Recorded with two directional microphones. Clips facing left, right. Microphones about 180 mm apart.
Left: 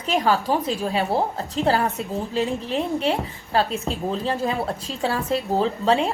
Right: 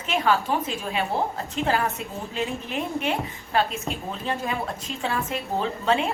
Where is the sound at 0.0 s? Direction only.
35° left (ahead or behind).